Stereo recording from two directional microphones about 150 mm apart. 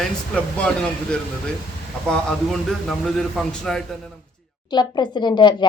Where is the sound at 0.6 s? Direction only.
5° left (ahead or behind).